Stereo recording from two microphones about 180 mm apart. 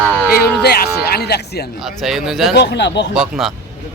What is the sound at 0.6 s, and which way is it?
Speech, 60° left (ahead or behind).